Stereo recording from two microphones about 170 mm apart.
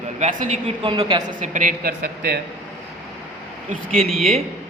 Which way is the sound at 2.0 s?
70° right (ahead or behind).